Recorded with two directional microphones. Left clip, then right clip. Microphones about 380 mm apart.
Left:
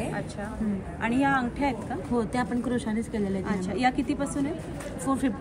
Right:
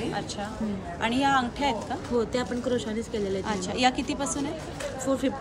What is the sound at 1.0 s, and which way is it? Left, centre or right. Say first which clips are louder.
Speech: right 1 dB; centre.